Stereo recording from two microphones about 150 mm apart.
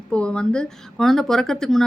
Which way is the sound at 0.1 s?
5° left (ahead or behind).